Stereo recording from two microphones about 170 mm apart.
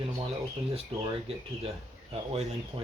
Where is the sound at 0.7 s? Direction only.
35° right (ahead or behind).